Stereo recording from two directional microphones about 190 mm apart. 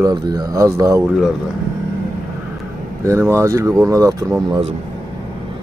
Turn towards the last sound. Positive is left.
turn(degrees=-20)  # may be behind; listen again after turning